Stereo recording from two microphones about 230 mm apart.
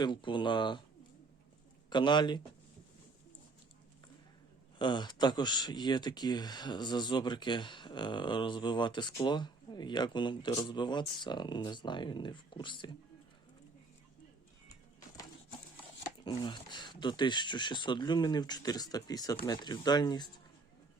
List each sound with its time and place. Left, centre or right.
0.0 s speech: left
1.9 s speech: centre
4.8 s speech: centre
16.2 s speech: centre